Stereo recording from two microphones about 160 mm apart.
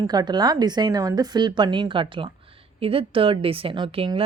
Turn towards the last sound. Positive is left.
turn(degrees=-35)  # may be behind; listen again after turning